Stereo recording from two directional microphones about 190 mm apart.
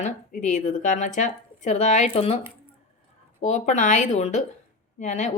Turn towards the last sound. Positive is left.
turn(degrees=40)  # may be behind; listen again after turning